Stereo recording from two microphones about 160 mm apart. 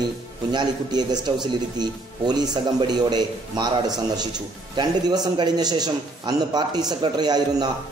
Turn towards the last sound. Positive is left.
turn(degrees=-25)  # may be behind; listen again after turning